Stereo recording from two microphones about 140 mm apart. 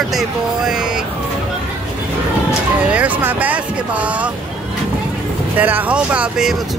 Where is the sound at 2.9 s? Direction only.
10° right (ahead or behind).